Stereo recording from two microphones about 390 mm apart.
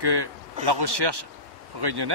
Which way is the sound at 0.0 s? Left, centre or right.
Right.